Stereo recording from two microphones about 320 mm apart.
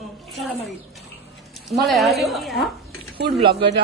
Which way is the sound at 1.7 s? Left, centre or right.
Centre.